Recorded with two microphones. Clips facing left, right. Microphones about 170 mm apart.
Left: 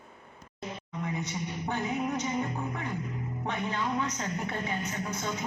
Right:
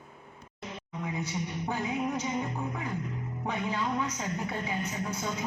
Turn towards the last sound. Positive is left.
turn(degrees=-5)  # may be behind; listen again after turning